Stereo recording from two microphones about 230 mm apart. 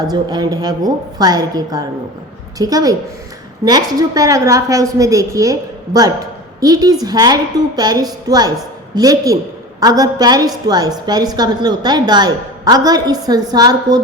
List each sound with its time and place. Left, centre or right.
0.1 s a woman's voice: centre